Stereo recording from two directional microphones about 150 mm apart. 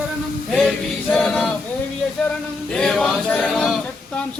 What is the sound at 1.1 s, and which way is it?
Male singing, 5° left (ahead or behind).